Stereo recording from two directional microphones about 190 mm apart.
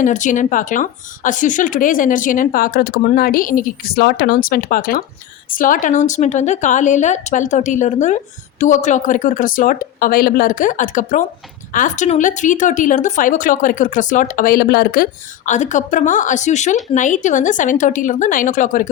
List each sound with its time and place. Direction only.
0.0 s speech: 40° left (ahead or behind)